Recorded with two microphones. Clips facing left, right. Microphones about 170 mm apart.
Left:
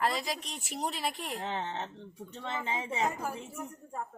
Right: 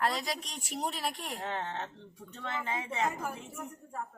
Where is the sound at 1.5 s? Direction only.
20° left (ahead or behind).